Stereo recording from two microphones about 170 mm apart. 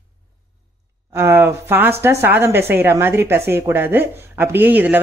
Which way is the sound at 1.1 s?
15° right (ahead or behind).